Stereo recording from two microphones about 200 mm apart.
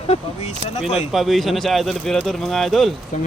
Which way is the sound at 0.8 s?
Centre (ahead or behind).